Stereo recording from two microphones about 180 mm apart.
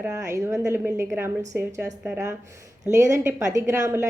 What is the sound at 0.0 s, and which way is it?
A woman's voice, 15° right (ahead or behind).